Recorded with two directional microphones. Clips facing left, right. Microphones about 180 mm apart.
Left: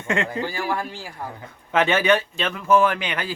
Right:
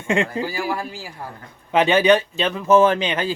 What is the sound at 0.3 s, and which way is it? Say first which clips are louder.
Speech: right 1 dB; 10° right (ahead or behind).